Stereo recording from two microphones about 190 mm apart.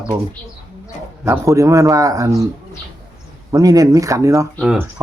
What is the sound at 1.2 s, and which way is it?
Speech, 15° right (ahead or behind).